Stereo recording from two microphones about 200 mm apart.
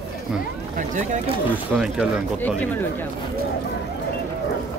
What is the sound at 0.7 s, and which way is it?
Speech, 40° right (ahead or behind).